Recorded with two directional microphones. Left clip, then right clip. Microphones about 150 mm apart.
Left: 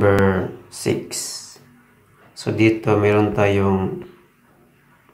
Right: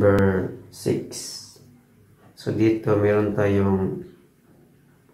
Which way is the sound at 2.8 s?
15° left (ahead or behind).